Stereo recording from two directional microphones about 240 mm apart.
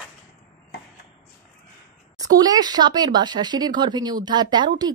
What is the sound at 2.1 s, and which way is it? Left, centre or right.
Speech, centre.